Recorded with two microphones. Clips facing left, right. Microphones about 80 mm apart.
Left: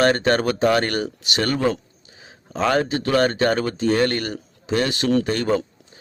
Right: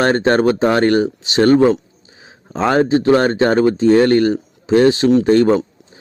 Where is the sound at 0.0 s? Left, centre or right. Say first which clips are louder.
Right 4 dB; right.